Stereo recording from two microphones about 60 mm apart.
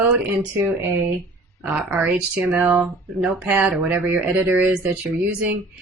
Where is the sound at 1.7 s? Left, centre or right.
Right.